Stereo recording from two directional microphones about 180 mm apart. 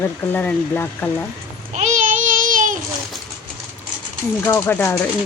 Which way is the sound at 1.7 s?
40° right (ahead or behind).